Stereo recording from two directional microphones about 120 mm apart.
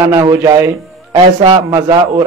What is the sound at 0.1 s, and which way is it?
Speech, 25° right (ahead or behind).